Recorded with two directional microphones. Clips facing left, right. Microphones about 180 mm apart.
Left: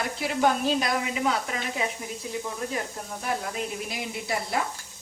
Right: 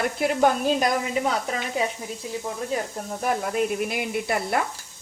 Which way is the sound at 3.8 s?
60° right (ahead or behind).